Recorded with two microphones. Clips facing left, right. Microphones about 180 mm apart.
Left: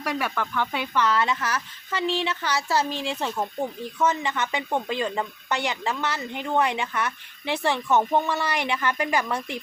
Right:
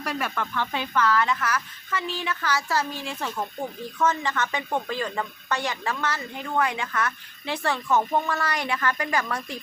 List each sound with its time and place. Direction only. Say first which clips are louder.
0.2 s speech: left 2 dB; 5° left (ahead or behind)
1.1 s speech: even; 25° left (ahead or behind)
3.9 s speech: even; 15° left (ahead or behind)